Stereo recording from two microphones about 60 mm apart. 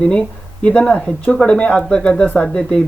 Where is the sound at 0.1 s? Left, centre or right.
Centre.